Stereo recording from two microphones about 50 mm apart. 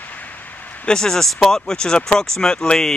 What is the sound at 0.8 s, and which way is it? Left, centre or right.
Speech, centre.